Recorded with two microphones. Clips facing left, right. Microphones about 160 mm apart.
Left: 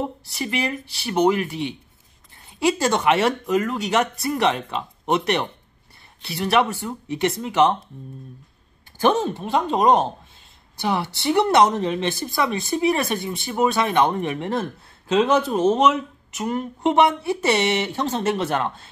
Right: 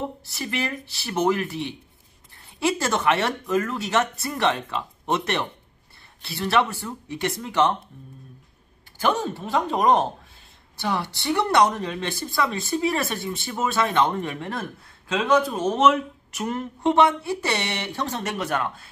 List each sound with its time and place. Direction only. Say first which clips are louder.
0.3 s speech: left 3 dB; 20° left (ahead or behind)
2.6 s speech: left 3 dB; 20° left (ahead or behind)
9.1 s speech: left 3 dB; 20° left (ahead or behind)